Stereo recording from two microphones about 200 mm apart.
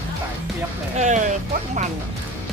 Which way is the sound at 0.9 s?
35° right (ahead or behind).